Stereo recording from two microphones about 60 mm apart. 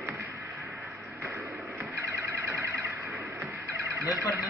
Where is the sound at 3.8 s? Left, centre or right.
Right.